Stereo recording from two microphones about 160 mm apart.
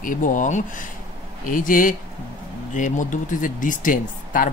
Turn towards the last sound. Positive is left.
turn(degrees=55)  # may be behind; listen again after turning